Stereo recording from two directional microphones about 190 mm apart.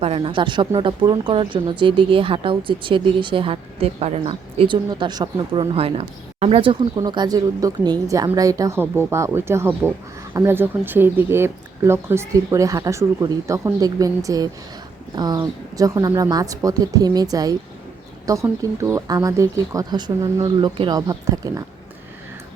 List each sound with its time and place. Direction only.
0.0 s speech: 30° right (ahead or behind)